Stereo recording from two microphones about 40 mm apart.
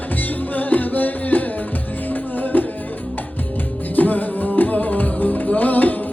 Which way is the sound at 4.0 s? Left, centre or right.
Left.